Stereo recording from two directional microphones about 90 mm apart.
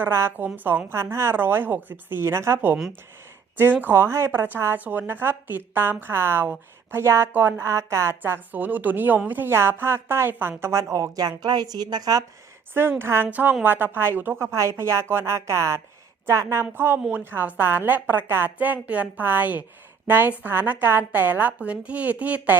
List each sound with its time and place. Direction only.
0.0 s speech: 25° right (ahead or behind)
7.6 s a woman's voice: 35° right (ahead or behind)
8.2 s a woman's voice: 20° right (ahead or behind); by 12.2 s 45° right (ahead or behind)
12.7 s a woman's voice: 25° right (ahead or behind)